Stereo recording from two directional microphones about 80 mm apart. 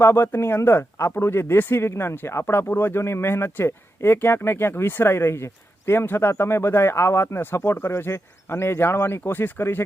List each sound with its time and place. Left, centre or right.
0.0 s speech: left